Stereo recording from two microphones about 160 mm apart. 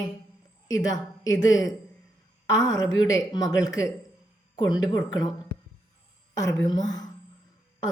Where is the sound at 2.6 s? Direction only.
20° left (ahead or behind).